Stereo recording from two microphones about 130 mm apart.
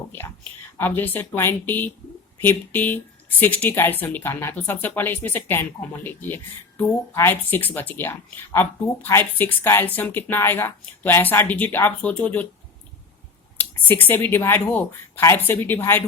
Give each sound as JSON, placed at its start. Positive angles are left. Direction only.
{"t": 0.8, "sound": "speech", "side_deg": 15}
{"t": 13.6, "sound": "speech", "side_deg": 15}